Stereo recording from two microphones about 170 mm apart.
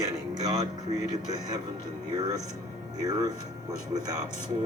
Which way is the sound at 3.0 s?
20° right (ahead or behind).